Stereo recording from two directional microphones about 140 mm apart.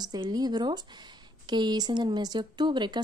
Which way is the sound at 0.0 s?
30° right (ahead or behind).